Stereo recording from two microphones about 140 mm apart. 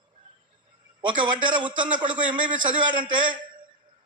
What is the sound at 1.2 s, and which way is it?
A man's voice, 35° right (ahead or behind).